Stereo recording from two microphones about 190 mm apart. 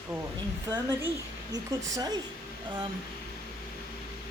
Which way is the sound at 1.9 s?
20° right (ahead or behind).